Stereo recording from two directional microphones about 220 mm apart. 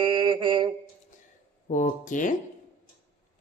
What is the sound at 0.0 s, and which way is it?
Mantra, 20° right (ahead or behind).